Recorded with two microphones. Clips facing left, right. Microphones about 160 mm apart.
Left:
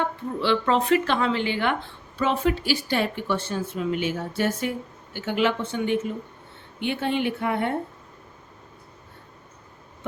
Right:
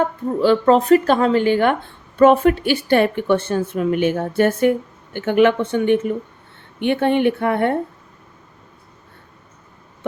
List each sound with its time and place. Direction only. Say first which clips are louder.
0.0 s speech: right 9 dB; 40° right (ahead or behind); by 7.8 s 55° right (ahead or behind)